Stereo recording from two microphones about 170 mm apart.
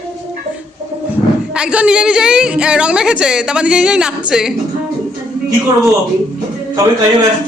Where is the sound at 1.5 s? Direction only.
5° right (ahead or behind).